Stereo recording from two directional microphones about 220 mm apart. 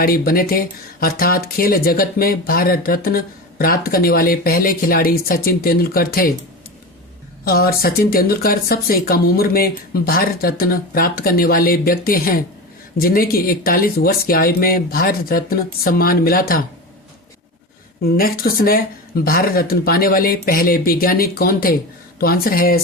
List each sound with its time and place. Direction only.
0.0 s speech: 40° left (ahead or behind)
7.4 s speech: 45° left (ahead or behind)
18.0 s speech: 45° left (ahead or behind)